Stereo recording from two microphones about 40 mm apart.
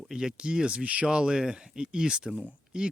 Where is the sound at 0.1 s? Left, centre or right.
Centre.